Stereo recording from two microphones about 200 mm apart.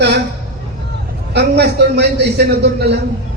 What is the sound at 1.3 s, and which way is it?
A man's voice, 55° right (ahead or behind).